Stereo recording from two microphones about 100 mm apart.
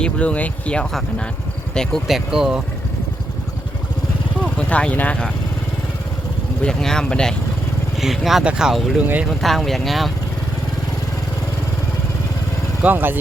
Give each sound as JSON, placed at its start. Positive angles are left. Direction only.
{"t": 0.0, "sound": "speech", "side_deg": 10}
{"t": 4.5, "sound": "speech", "side_deg": 10}
{"t": 6.6, "sound": "speech", "side_deg": 5}
{"t": 12.8, "sound": "speech", "side_deg": -20}